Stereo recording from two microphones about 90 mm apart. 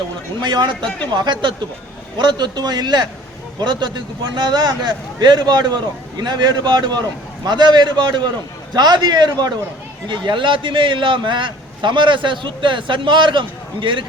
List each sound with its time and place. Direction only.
0.4 s a man's voice: 55° right (ahead or behind)
10.1 s a man's voice: 65° right (ahead or behind)